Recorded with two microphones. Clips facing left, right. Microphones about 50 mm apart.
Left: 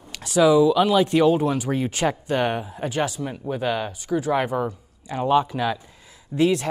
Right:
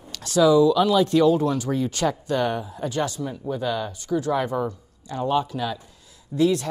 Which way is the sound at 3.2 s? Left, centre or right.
Left.